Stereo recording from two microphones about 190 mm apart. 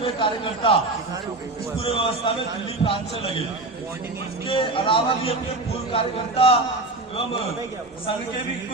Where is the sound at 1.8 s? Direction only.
30° left (ahead or behind).